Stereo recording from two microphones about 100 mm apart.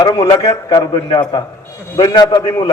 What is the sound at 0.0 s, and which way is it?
A man's voice, 40° left (ahead or behind).